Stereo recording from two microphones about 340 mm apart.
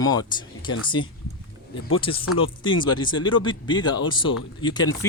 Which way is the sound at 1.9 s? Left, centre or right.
Centre.